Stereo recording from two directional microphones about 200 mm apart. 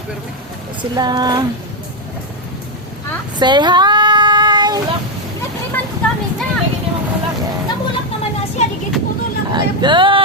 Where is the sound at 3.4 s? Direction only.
20° right (ahead or behind).